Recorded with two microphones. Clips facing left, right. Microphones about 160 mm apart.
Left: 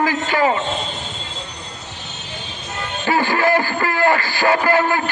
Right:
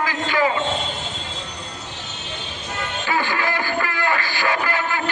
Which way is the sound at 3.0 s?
40° left (ahead or behind).